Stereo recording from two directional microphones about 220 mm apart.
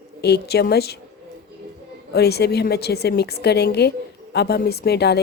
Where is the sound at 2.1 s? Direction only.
45° left (ahead or behind).